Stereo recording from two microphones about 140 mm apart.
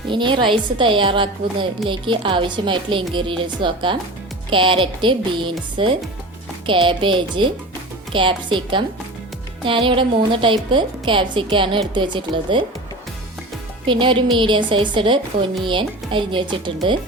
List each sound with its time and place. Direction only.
0.1 s speech: 35° right (ahead or behind)
13.8 s speech: 35° right (ahead or behind)